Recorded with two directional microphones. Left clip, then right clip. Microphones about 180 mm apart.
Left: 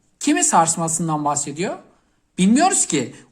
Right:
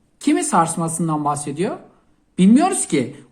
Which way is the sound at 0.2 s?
25° left (ahead or behind).